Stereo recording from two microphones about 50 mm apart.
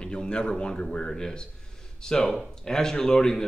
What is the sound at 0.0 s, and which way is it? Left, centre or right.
Speech, centre.